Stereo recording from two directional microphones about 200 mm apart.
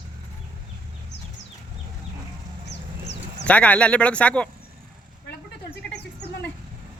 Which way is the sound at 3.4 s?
5° left (ahead or behind).